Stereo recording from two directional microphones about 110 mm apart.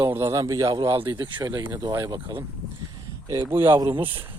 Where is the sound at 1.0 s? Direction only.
45° right (ahead or behind).